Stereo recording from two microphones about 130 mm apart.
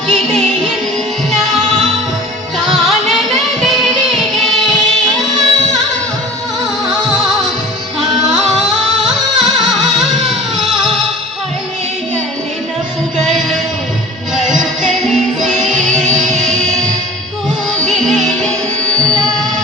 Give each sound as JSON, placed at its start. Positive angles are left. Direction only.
{"t": 0.1, "sound": "music", "side_deg": 0}
{"t": 2.6, "sound": "music", "side_deg": 0}
{"t": 6.9, "sound": "music", "side_deg": 0}
{"t": 9.1, "sound": "music", "side_deg": 0}
{"t": 13.1, "sound": "music", "side_deg": 0}
{"t": 17.8, "sound": "music", "side_deg": 0}